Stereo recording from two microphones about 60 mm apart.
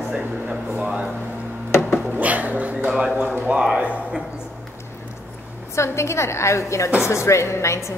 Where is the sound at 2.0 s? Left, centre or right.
Right.